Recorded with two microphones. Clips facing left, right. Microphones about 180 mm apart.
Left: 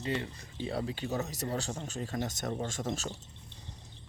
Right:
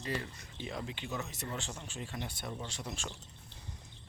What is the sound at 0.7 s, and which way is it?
Speech, 35° left (ahead or behind).